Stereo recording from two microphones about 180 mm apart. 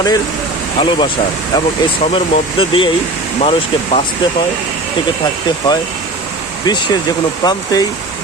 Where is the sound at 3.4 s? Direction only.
35° left (ahead or behind).